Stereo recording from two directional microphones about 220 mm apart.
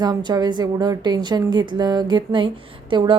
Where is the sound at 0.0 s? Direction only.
20° right (ahead or behind).